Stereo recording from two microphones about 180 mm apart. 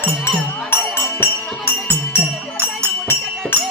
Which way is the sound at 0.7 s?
10° left (ahead or behind).